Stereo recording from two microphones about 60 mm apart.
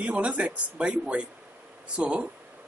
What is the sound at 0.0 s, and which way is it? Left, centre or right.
Speech, right.